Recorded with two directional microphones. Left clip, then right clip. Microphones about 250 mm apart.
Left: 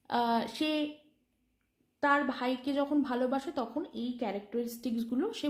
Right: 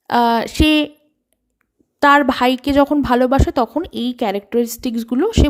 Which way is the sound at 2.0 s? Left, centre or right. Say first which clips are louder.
Right 17 dB; right.